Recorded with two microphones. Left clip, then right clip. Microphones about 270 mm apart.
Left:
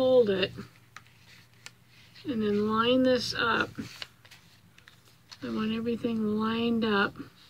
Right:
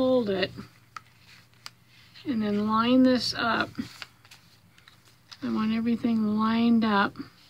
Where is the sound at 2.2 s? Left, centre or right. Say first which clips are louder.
Even; right.